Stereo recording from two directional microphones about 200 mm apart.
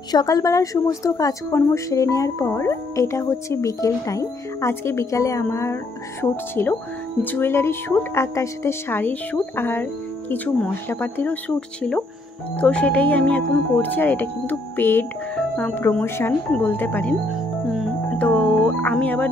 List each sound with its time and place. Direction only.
0.1 s a woman's voice: 20° left (ahead or behind)